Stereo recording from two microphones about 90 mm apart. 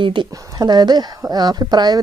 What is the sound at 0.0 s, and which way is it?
Speech, 60° right (ahead or behind).